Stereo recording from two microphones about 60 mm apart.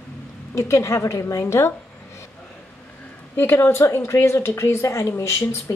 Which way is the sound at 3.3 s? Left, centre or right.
Left.